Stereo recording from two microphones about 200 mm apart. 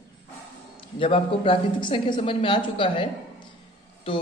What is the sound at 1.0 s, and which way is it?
Speech, 25° left (ahead or behind).